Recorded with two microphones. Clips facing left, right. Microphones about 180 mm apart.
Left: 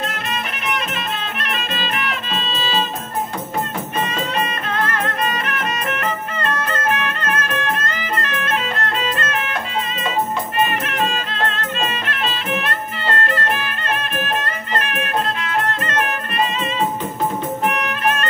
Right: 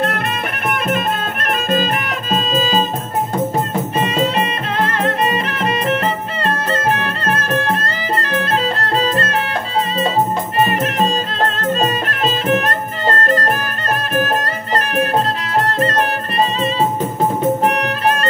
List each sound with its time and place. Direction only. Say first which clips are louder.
0.0 s music: right 6 dB; 55° right (ahead or behind)
4.0 s music: right 5 dB; 30° right (ahead or behind)
17.6 s music: right 4 dB; 35° right (ahead or behind)